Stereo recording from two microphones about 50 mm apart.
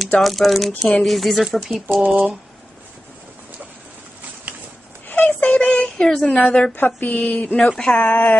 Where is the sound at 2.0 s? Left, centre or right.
Right.